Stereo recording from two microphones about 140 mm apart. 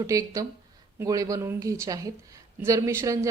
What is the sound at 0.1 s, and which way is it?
Speech, 25° right (ahead or behind).